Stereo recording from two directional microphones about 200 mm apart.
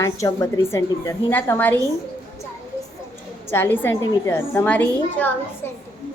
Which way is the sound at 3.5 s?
10° left (ahead or behind).